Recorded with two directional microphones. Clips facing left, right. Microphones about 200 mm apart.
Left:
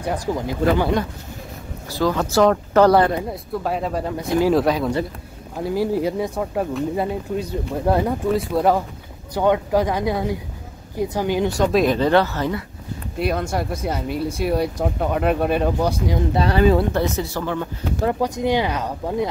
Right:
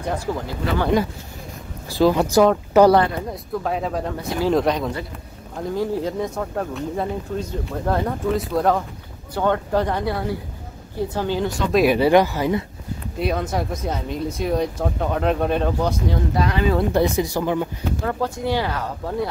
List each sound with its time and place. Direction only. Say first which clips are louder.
0.0 s speech: left 2 dB; 15° left (ahead or behind)
1.9 s speech: right 4 dB; 15° right (ahead or behind)
3.2 s speech: left 1 dB; 5° left (ahead or behind)
11.7 s speech: right 4 dB; 10° right (ahead or behind)
13.2 s speech: left 1 dB; centre (ahead or behind)
16.3 s speech: left 5 dB; 35° left (ahead or behind)
16.9 s speech: right 3 dB; 15° right (ahead or behind)
18.0 s speech: left 5 dB; 20° left (ahead or behind)